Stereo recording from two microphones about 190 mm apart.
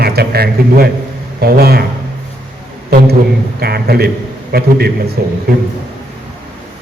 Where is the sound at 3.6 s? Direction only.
55° right (ahead or behind).